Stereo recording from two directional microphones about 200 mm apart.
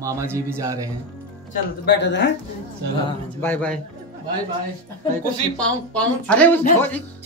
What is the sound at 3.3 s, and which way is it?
Speech, 10° left (ahead or behind).